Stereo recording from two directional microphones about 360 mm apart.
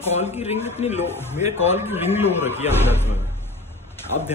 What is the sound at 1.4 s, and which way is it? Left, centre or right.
Speech, centre.